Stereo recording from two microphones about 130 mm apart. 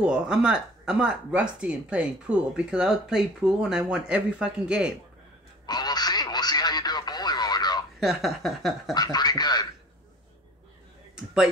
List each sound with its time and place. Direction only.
0.0 s speech: 5° right (ahead or behind)
5.7 s radio: 30° left (ahead or behind)
8.0 s a sound: centre (ahead or behind)
8.9 s speech: 30° left (ahead or behind)